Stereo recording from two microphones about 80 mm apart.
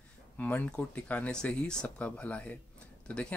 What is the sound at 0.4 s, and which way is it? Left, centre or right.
Speech, centre.